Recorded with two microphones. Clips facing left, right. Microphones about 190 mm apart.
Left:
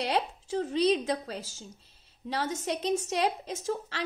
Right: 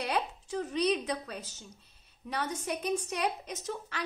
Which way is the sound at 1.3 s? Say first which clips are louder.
Left 3 dB; 90° left.